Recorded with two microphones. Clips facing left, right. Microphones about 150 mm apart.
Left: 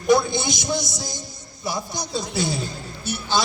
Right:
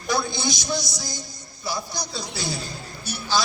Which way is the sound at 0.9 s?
20° left (ahead or behind).